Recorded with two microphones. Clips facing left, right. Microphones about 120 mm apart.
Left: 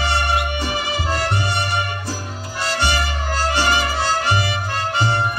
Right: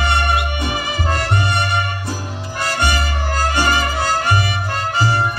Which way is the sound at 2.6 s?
50° right (ahead or behind).